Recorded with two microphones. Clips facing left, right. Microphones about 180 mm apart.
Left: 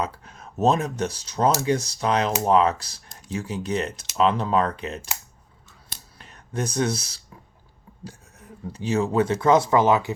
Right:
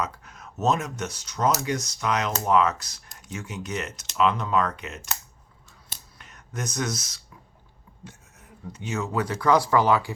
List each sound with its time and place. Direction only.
0.0 s speech: 30° left (ahead or behind)
6.1 s speech: 30° left (ahead or behind)
8.6 s speech: 35° left (ahead or behind)